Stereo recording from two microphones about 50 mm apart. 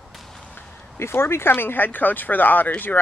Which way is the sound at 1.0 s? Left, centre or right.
Left.